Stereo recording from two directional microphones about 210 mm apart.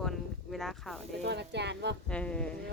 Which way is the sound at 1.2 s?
55° right (ahead or behind).